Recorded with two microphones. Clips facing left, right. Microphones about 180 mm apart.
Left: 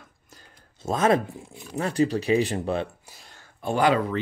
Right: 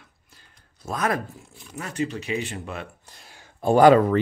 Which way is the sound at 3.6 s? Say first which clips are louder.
Right 7 dB; 40° right (ahead or behind).